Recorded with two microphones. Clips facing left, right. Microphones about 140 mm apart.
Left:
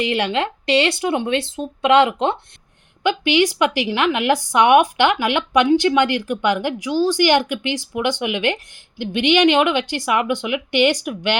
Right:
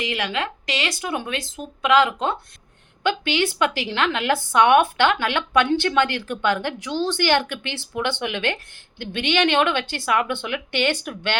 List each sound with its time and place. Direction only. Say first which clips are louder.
0.0 s speech: left 6 dB; 30° left (ahead or behind)
3.0 s speech: left 5 dB; 15° left (ahead or behind)